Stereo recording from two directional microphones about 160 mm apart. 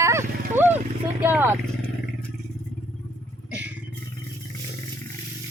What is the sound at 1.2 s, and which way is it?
Vehicle, 15° right (ahead or behind).